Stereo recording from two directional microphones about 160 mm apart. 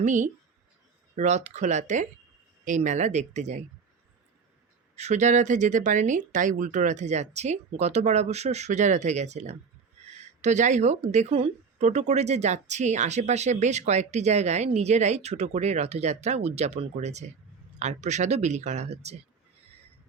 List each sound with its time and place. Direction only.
1.1 s speech: 45° right (ahead or behind)
4.9 s speech: 45° right (ahead or behind)